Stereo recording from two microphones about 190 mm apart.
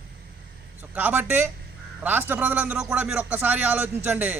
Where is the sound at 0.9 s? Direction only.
10° right (ahead or behind).